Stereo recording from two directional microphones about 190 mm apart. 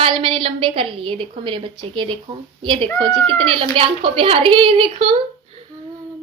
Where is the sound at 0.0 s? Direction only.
30° right (ahead or behind).